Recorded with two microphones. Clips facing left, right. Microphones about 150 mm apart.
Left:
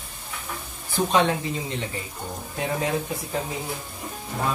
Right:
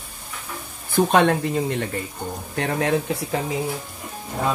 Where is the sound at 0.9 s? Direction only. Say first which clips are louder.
Right 4 dB; 55° right (ahead or behind).